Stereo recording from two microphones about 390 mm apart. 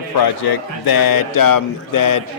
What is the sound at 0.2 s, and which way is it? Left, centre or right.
A man's voice, left.